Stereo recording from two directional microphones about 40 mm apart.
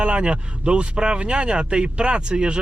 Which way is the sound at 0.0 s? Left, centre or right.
Right.